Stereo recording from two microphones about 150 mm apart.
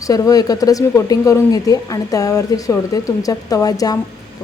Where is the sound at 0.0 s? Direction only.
25° left (ahead or behind).